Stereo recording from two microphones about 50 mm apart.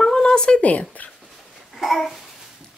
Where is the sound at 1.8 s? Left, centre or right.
Centre.